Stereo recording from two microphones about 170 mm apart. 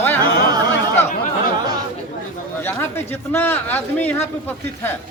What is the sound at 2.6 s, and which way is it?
Speech, 15° left (ahead or behind).